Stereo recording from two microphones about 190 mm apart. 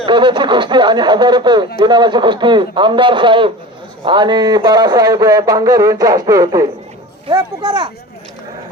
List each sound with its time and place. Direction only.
0.0 s speech: 25° right (ahead or behind)